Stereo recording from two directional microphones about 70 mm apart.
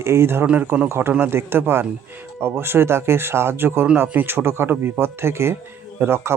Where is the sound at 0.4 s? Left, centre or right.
Right.